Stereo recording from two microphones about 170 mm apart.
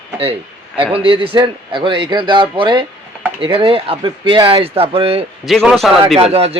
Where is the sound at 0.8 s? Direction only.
30° right (ahead or behind).